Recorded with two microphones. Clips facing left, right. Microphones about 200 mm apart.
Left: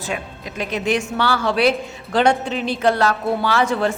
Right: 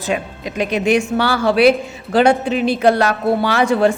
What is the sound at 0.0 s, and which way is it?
Speech, 20° right (ahead or behind).